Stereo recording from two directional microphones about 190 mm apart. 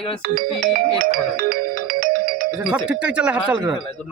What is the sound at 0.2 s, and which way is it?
Speech, 50° right (ahead or behind).